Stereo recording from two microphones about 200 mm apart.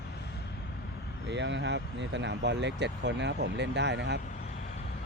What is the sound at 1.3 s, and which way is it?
Speech, 60° right (ahead or behind).